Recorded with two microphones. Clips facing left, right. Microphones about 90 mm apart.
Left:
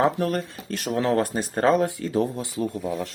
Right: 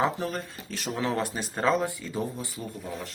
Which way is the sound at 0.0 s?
60° left (ahead or behind).